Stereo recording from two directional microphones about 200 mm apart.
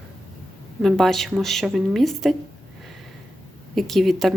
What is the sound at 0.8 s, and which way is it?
A woman's voice, centre (ahead or behind).